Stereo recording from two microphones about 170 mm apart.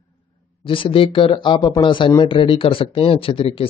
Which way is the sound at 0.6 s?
30° left (ahead or behind).